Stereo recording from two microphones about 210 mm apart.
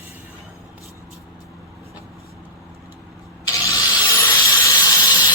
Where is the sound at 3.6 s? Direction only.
15° left (ahead or behind).